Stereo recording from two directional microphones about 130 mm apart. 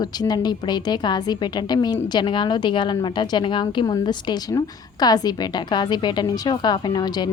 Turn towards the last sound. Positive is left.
turn(degrees=30)  # may be behind; listen again after turning